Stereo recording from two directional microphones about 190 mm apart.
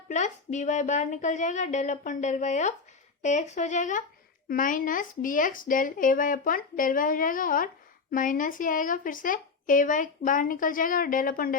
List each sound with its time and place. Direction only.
0.1 s speech: 40° left (ahead or behind)